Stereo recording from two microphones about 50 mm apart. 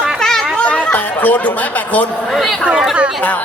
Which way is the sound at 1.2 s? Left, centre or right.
Left.